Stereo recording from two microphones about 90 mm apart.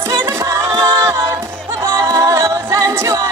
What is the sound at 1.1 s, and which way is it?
A capella, 35° right (ahead or behind).